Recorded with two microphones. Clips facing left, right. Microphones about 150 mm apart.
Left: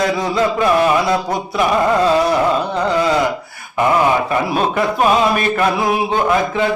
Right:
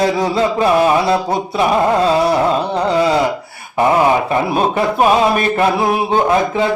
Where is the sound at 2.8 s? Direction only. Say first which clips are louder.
Right 2 dB; 30° right (ahead or behind).